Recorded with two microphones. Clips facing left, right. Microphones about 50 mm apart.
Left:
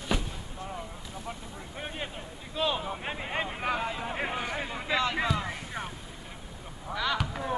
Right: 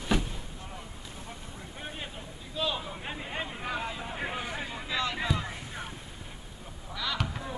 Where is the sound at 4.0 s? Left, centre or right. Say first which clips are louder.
Left 3 dB; left.